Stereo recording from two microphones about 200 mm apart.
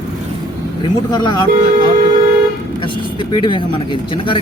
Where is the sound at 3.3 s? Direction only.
25° left (ahead or behind).